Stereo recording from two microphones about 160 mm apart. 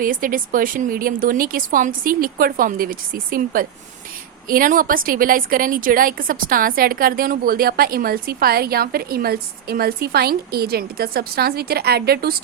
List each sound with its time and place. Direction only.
0.0 s a woman's voice: 60° right (ahead or behind); by 12.3 s 80° right